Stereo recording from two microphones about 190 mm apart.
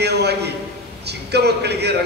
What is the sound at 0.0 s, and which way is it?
A man's voice, 60° right (ahead or behind).